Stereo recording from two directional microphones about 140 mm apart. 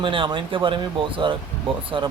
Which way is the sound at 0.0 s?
35° right (ahead or behind).